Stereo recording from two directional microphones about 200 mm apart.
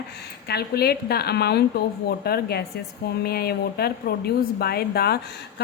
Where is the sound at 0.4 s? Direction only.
55° left (ahead or behind).